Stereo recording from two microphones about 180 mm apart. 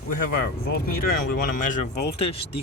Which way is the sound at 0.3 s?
60° left (ahead or behind).